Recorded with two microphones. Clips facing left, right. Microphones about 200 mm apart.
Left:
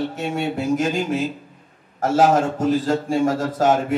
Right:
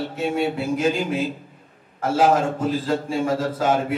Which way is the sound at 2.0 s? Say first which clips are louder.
Left 2 dB; 45° left (ahead or behind).